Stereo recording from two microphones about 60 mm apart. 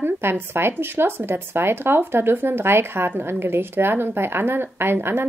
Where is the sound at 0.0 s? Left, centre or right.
Right.